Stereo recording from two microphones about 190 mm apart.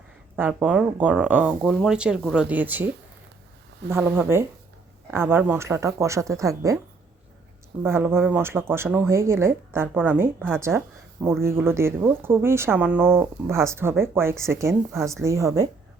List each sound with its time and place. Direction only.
0.3 s speech: 10° right (ahead or behind)
7.8 s speech: 10° right (ahead or behind)